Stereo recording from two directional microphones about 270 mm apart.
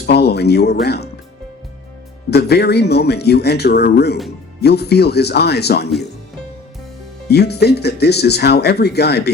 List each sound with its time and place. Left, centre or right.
0.0 s speech: left
2.3 s speech: left
7.3 s speech: left